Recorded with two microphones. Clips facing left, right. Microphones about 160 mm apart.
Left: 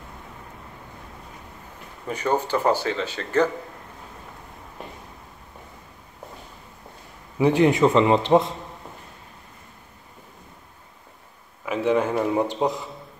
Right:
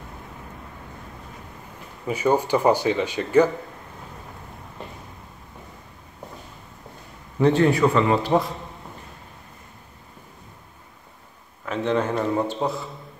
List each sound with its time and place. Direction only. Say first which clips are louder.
2.0 s speech: right 3 dB; 10° right (ahead or behind)
7.3 s a man's voice: even; 10° left (ahead or behind)
11.6 s a man's voice: left 2 dB; 10° left (ahead or behind)